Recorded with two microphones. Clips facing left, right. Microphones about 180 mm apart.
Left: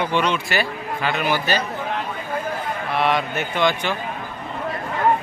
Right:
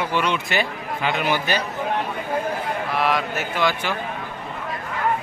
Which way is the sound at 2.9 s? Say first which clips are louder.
Left 3 dB; centre (ahead or behind).